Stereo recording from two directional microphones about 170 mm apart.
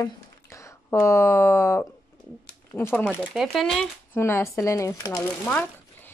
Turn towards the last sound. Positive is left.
turn(degrees=10)  # may be behind; listen again after turning